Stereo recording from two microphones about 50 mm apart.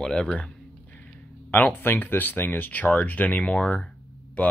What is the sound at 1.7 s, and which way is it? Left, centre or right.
Speech, left.